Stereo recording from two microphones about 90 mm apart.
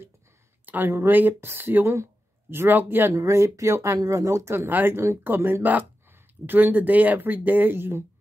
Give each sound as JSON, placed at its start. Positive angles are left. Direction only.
{"t": 0.7, "sound": "speech", "side_deg": -25}